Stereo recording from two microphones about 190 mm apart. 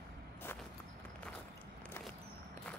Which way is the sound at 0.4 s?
10° left (ahead or behind).